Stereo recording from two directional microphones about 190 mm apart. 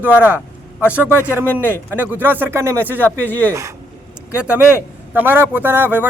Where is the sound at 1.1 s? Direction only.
15° left (ahead or behind).